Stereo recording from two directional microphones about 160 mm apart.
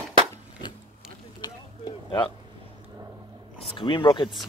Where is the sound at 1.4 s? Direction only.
25° left (ahead or behind).